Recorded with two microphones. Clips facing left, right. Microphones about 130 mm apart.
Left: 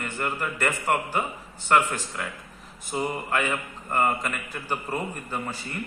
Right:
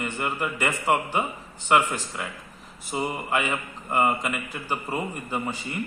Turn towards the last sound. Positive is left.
turn(degrees=-10)  # may be behind; listen again after turning